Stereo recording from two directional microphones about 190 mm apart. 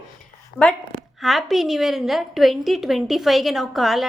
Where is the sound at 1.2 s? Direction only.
Centre (ahead or behind).